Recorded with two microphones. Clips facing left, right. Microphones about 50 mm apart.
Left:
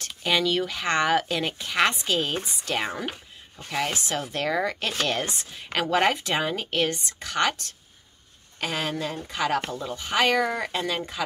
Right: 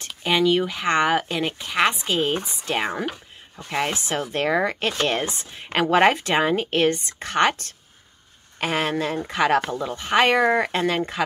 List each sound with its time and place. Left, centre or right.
0.0 s speech: centre; by 11.2 s right